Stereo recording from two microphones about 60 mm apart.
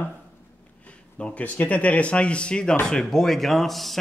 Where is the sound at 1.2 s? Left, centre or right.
Left; by 4.0 s centre.